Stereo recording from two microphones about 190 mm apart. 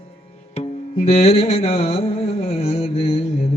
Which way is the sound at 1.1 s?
30° left (ahead or behind).